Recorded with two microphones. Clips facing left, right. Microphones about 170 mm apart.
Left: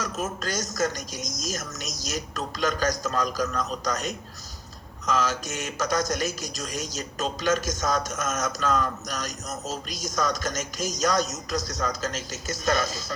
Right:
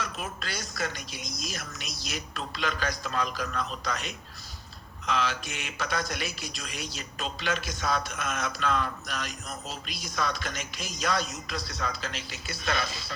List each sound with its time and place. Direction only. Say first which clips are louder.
0.0 s speech: left 6 dB; 45° left (ahead or behind)